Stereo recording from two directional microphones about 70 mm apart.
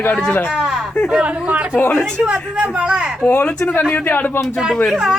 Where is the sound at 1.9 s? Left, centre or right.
Centre.